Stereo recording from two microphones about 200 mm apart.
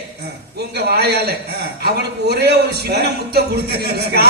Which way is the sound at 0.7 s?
50° right (ahead or behind).